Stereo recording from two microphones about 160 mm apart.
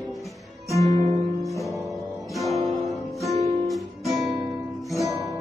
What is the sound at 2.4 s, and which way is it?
Music, centre (ahead or behind).